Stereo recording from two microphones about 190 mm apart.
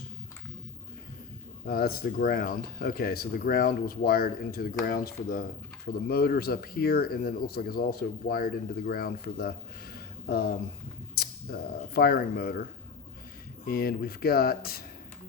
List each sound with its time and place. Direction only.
1.6 s speech: 55° left (ahead or behind)
13.7 s speech: 50° left (ahead or behind)